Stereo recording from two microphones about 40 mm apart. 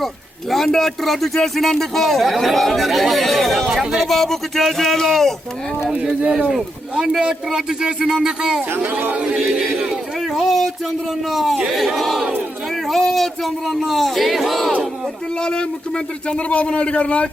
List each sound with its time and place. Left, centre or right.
0.5 s speech: centre
5.9 s a man's voice: right
10.3 s speech: centre
15.4 s speech: left
16.3 s a man's voice: left